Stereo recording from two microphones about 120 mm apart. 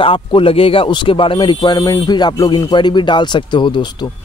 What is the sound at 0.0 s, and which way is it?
Speech, 45° left (ahead or behind).